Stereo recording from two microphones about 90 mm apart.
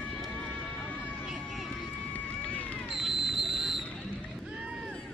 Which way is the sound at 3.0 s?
Centre (ahead or behind).